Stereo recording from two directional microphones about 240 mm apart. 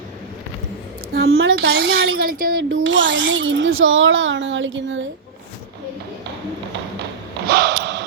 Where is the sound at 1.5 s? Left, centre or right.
Right.